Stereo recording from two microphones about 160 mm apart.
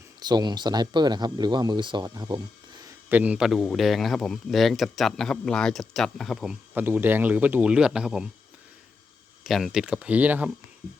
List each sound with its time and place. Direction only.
0.2 s speech: 25° right (ahead or behind)
2.8 s a man's voice: 10° right (ahead or behind)
9.4 s a man's voice: centre (ahead or behind)